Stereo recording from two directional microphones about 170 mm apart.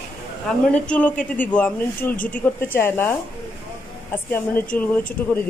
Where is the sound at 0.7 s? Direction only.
5° left (ahead or behind).